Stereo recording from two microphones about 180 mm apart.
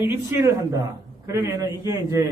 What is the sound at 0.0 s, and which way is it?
A man's voice, 15° right (ahead or behind).